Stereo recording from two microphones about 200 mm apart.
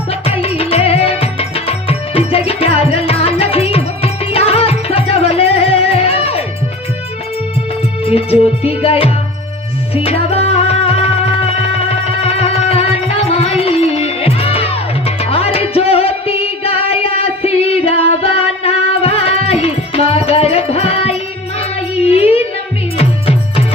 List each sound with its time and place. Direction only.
0.1 s music: 30° left (ahead or behind)
8.0 s music: 30° left (ahead or behind)